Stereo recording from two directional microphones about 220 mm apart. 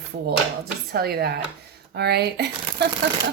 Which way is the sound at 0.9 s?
45° right (ahead or behind).